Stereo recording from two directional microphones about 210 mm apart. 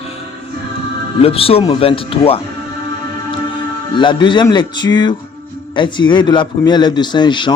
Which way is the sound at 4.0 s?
20° left (ahead or behind).